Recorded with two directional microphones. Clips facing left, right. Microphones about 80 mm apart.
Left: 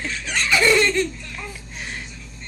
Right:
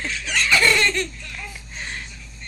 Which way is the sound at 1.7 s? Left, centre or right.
Centre.